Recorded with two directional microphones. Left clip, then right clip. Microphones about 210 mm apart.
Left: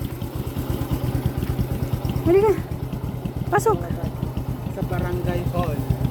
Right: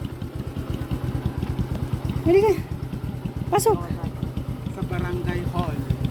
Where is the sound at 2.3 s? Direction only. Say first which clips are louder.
Left 1 dB; 10° right (ahead or behind).